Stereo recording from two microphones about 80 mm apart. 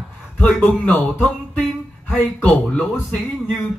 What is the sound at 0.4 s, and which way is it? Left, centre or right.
A man's voice, left.